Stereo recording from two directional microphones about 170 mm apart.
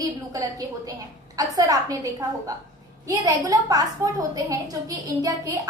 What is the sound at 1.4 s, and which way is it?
Speech, 20° right (ahead or behind).